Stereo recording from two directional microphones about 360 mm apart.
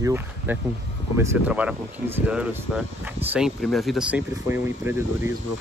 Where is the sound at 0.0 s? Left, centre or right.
Centre.